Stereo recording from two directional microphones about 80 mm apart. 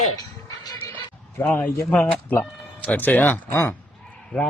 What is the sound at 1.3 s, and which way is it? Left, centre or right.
Speech, left.